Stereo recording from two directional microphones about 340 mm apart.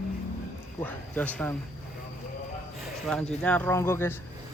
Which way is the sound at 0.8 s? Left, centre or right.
Centre.